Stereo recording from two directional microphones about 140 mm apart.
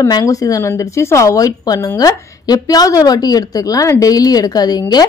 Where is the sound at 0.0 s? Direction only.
25° left (ahead or behind).